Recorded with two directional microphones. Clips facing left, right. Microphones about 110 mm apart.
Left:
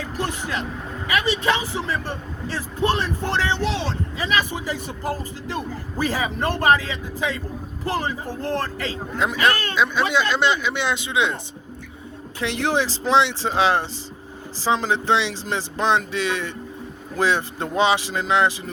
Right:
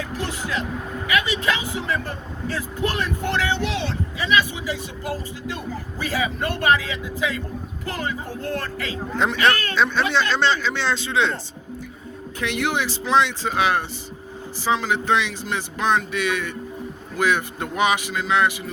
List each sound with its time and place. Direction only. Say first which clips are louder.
0.2 s a man's voice: left 2 dB; 45° left (ahead or behind)
5.5 s a man's voice: left 4 dB; 40° left (ahead or behind)
9.1 s speech: right 1 dB; 5° left (ahead or behind)
12.4 s speech: left 2 dB; 30° left (ahead or behind)